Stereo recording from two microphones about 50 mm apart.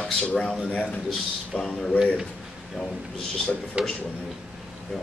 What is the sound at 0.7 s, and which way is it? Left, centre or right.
Speech, left.